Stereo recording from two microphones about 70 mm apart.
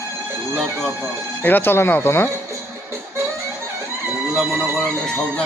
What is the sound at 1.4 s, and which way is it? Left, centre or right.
Speech, left.